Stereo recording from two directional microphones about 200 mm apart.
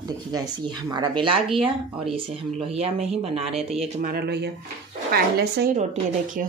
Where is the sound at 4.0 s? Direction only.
50° right (ahead or behind).